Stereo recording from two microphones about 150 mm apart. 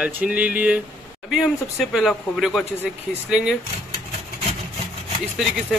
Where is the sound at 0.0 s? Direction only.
10° right (ahead or behind).